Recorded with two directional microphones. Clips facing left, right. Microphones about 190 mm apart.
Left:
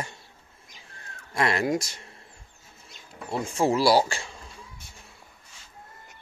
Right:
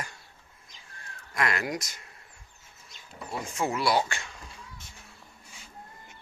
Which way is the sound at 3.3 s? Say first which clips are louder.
Left 6 dB; 30° left (ahead or behind).